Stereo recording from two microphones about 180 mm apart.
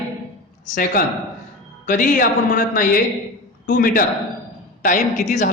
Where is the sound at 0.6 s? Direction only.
50° left (ahead or behind).